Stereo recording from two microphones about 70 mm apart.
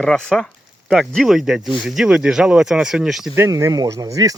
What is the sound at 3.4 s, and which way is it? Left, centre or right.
Speech, right.